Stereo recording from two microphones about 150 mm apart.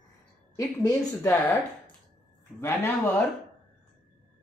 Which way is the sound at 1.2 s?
15° left (ahead or behind).